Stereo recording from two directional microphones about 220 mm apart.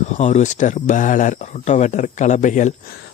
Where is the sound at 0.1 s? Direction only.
30° left (ahead or behind).